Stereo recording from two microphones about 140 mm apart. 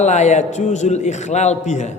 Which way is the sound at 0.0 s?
55° left (ahead or behind).